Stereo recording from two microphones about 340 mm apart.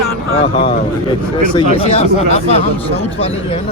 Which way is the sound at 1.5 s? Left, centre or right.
Centre.